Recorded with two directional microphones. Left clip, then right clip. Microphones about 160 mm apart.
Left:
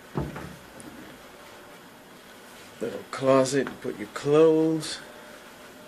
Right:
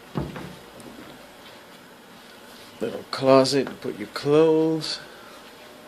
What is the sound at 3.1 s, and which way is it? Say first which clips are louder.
Speech: right 4 dB; 20° right (ahead or behind).